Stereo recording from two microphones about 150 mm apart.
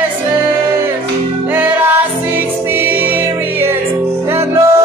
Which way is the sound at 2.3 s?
15° right (ahead or behind).